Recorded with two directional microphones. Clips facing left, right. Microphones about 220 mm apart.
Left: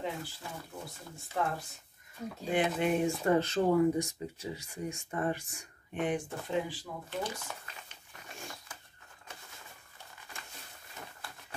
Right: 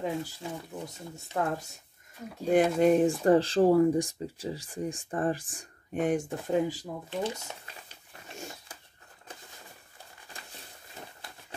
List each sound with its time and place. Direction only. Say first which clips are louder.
1.3 s speech: right 3 dB; 45° right (ahead or behind)
7.1 s speech: right 4 dB; 25° right (ahead or behind)